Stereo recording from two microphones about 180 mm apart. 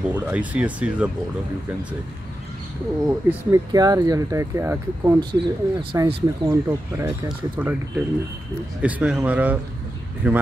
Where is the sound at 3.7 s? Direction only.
20° right (ahead or behind).